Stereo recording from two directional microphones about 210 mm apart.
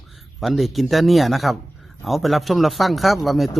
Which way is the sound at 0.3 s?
Centre (ahead or behind).